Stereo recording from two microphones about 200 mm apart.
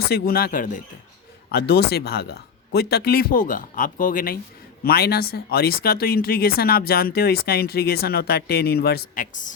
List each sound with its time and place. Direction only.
0.0 s speech: 50° left (ahead or behind)
1.5 s speech: 55° left (ahead or behind)